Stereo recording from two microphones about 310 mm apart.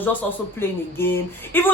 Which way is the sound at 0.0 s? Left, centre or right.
Centre.